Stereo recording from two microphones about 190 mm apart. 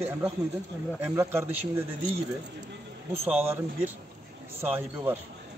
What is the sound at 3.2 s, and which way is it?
Speech, 10° right (ahead or behind).